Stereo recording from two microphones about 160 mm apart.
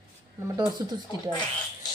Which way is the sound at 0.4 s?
25° right (ahead or behind).